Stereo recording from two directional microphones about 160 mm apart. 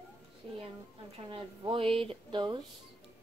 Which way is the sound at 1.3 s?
35° right (ahead or behind).